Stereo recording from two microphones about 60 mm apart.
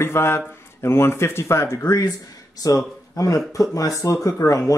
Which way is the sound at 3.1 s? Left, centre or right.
Left.